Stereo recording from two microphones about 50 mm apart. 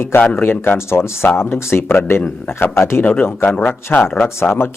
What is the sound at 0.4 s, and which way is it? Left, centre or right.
Speech, left.